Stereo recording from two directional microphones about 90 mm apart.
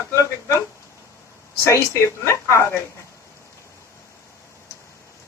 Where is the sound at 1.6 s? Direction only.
35° left (ahead or behind).